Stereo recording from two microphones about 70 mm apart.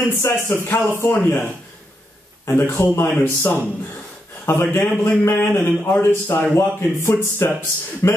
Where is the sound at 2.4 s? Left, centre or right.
Left.